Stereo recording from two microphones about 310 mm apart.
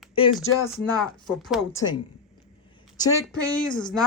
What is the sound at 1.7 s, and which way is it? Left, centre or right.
Speech, centre.